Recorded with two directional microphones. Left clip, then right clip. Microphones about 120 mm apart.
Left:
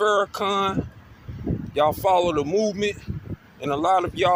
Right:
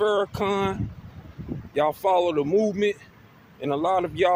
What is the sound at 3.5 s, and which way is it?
Speech, 15° right (ahead or behind).